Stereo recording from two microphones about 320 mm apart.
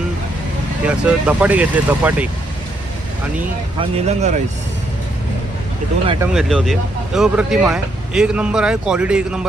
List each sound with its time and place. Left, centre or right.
0.8 s speech: centre
3.8 s speech: right
6.2 s speech: centre